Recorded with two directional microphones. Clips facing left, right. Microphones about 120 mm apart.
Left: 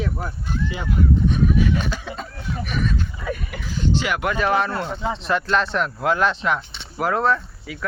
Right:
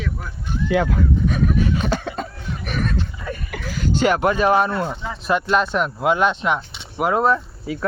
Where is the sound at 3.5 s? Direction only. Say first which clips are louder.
Right 2 dB; 55° right (ahead or behind).